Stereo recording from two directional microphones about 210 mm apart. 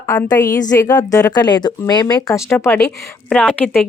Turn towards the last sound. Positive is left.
turn(degrees=0)  # may be behind; listen again after turning